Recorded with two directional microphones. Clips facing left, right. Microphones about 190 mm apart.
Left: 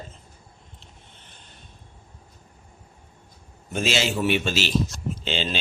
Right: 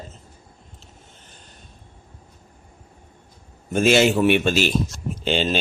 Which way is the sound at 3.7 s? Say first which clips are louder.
Right 8 dB; 55° right (ahead or behind).